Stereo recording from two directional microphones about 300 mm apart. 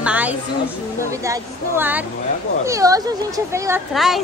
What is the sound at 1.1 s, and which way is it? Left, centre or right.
A woman's voice, centre.